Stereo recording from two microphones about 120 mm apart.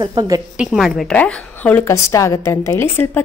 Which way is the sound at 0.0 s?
35° right (ahead or behind).